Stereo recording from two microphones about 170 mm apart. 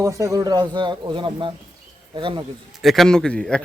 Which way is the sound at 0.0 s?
20° right (ahead or behind).